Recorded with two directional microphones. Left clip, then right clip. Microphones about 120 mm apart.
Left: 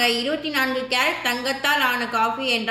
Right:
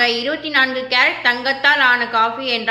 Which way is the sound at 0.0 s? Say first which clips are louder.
Right 4 dB; 20° left (ahead or behind).